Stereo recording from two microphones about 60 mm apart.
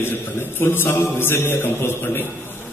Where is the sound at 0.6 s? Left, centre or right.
Left.